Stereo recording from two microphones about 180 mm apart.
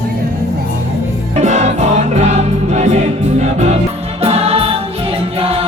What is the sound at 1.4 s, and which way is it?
Music, 40° right (ahead or behind).